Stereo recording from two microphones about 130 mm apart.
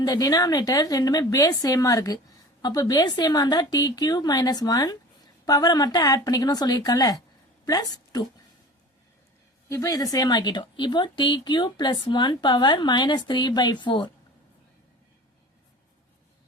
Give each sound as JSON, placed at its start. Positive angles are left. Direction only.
{"t": 0.0, "sound": "a woman's voice", "side_deg": 30}
{"t": 9.6, "sound": "speech", "side_deg": 25}